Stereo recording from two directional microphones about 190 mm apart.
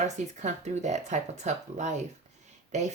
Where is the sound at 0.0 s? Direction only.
40° right (ahead or behind).